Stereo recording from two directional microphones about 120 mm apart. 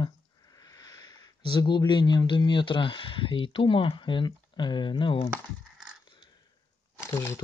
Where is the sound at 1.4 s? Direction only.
40° left (ahead or behind).